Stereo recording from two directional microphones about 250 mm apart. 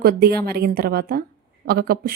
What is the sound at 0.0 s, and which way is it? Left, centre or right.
A woman's voice, right.